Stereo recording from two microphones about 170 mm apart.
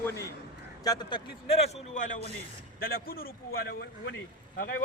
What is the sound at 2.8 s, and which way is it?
A man's voice, 60° left (ahead or behind).